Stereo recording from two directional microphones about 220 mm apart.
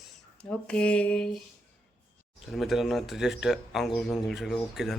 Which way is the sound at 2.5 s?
Centre (ahead or behind).